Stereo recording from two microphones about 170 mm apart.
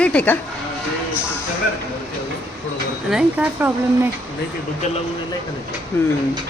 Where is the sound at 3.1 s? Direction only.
5° right (ahead or behind).